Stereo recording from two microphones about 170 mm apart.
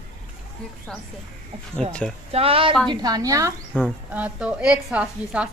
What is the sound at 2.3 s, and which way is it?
Speech, 35° right (ahead or behind).